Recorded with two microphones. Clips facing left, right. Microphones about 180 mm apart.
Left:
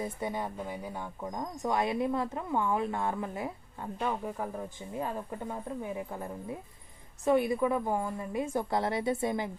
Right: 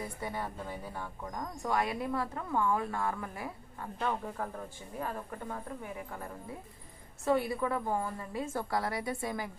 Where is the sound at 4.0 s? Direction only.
10° left (ahead or behind).